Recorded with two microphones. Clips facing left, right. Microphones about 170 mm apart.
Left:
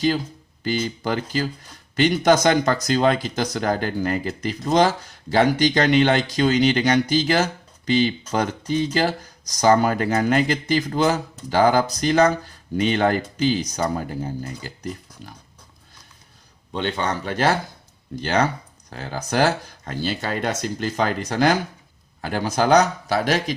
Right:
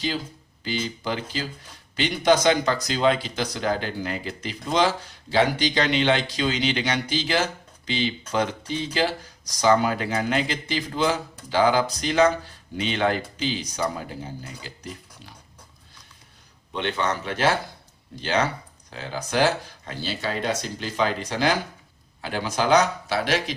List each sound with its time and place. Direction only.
0.6 s speech: 45° left (ahead or behind)
16.7 s speech: 35° left (ahead or behind)